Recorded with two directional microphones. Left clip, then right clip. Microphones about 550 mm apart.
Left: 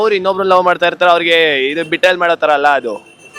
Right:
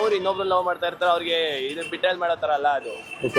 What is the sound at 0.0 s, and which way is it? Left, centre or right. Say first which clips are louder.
Speech: left 9 dB; left.